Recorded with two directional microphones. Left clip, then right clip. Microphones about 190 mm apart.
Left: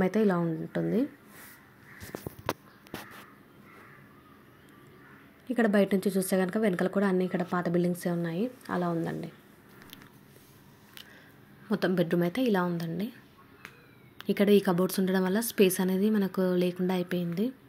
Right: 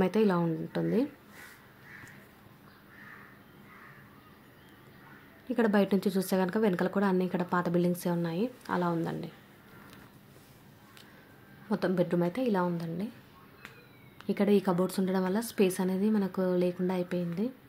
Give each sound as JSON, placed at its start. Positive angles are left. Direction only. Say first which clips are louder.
{"t": 0.0, "sound": "speech", "louder": "even", "side_deg": 5}
{"t": 5.5, "sound": "speech", "louder": "left 2 dB", "side_deg": 0}
{"t": 11.7, "sound": "a woman's voice", "louder": "left 1 dB", "side_deg": 5}
{"t": 14.1, "sound": "a woman's voice", "louder": "left 4 dB", "side_deg": 10}